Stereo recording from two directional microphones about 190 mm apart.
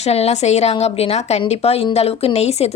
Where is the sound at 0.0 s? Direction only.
35° left (ahead or behind).